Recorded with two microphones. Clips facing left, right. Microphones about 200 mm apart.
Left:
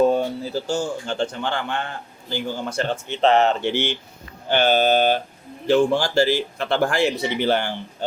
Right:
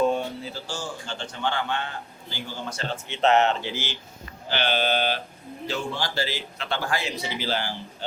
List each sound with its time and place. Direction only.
0.0 s a sound: 45° left (ahead or behind)
0.7 s a man's voice: 50° left (ahead or behind)
3.1 s speech: 35° left (ahead or behind)
3.6 s a man's voice: 65° left (ahead or behind)
4.4 s a man's voice: 45° left (ahead or behind)